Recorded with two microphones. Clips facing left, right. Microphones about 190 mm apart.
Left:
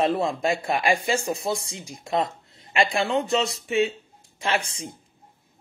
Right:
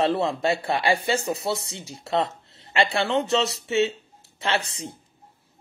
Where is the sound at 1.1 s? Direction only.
30° left (ahead or behind).